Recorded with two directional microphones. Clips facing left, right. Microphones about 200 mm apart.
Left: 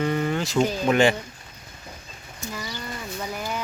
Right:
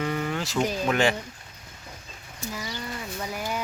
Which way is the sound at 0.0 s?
Centre (ahead or behind).